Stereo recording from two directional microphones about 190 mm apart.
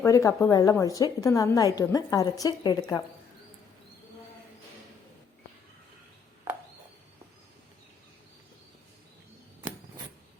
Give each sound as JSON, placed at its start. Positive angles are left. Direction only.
{"t": 0.0, "sound": "a woman's voice", "side_deg": 15}